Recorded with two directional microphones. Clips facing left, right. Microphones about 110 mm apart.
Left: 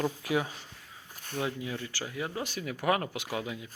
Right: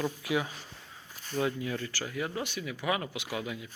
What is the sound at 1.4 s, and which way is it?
Speech, 20° left (ahead or behind).